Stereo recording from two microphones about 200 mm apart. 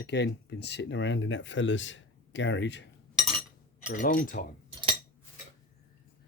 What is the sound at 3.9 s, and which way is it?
Speech, 45° left (ahead or behind).